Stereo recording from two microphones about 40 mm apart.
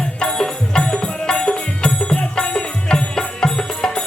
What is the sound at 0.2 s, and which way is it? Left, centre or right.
Music, centre.